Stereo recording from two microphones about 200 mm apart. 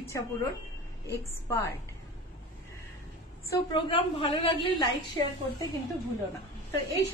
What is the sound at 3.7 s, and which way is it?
A woman's voice, 25° left (ahead or behind).